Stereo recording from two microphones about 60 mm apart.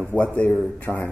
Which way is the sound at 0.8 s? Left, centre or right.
Left.